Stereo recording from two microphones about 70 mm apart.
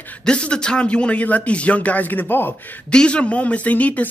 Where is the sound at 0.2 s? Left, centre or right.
Centre; by 2.5 s left.